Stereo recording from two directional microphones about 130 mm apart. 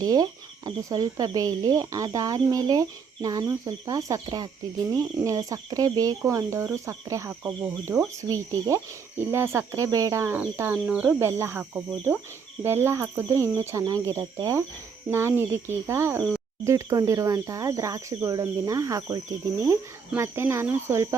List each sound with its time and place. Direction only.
0.0 s speech: 30° right (ahead or behind); by 11.2 s 10° right (ahead or behind)
11.2 s speech: 20° right (ahead or behind)